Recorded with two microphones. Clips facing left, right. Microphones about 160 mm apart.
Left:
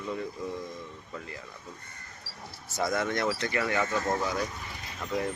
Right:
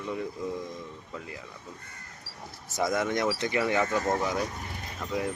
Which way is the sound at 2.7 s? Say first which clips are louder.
Right 2 dB; 15° right (ahead or behind).